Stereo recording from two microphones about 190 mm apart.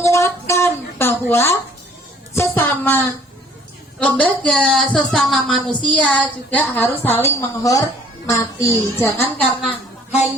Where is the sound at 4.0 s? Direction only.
5° left (ahead or behind).